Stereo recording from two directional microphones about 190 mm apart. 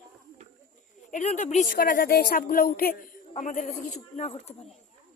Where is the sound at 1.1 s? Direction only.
40° left (ahead or behind).